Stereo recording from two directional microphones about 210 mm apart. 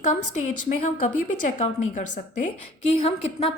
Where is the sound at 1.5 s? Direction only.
35° left (ahead or behind).